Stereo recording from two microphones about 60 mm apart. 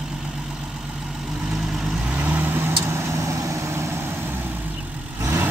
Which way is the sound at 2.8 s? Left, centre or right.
Right.